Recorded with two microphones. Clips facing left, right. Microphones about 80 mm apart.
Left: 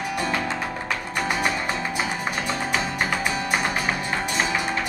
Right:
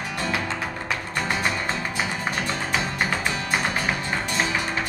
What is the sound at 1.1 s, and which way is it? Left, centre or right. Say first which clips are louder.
Music: left 2 dB; centre.